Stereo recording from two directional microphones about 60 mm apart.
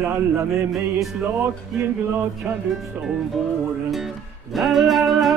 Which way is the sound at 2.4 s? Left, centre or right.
Right.